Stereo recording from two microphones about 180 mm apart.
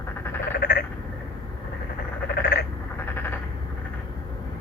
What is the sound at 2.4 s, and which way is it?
Frog, 65° left (ahead or behind).